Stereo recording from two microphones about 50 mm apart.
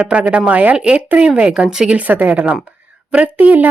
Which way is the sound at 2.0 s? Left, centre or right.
Right.